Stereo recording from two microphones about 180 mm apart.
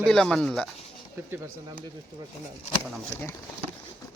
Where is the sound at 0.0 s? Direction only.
5° left (ahead or behind).